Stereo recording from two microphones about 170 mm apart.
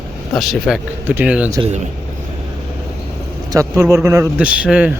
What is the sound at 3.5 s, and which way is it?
A man's voice, 20° right (ahead or behind).